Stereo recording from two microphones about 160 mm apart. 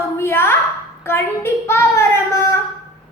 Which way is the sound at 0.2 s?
15° left (ahead or behind).